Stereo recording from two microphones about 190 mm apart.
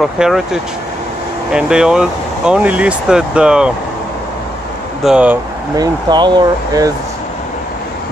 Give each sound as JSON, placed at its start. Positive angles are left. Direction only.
{"t": 0.0, "sound": "speech", "side_deg": 0}
{"t": 5.0, "sound": "speech", "side_deg": -5}
{"t": 5.8, "sound": "speech", "side_deg": -25}